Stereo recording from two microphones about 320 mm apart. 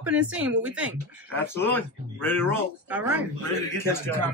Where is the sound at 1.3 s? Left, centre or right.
Centre.